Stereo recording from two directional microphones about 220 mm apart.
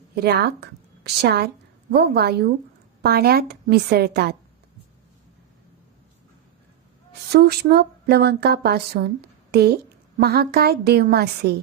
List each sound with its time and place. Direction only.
0.1 s a woman's voice: 45° right (ahead or behind)
7.1 s a woman's voice: 45° right (ahead or behind)